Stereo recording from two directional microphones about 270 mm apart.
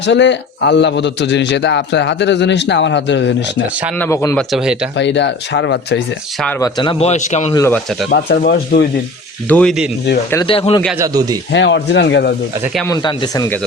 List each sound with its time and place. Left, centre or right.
0.0 s a man's voice: left
3.9 s speech: centre
4.5 s speech: centre
4.9 s a man's voice: left
6.4 s speech: centre; by 7.5 s left
7.5 s speech: centre
8.1 s a man's voice: left
9.5 s speech: centre
10.2 s speech: centre
10.8 s speech: centre
11.5 s a man's voice: left
12.7 s speech: centre